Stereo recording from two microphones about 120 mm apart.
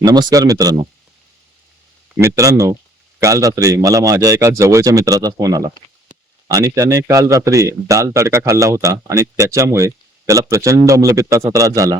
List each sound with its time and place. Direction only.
0.0 s speech: 35° right (ahead or behind)
2.1 s speech: 25° right (ahead or behind)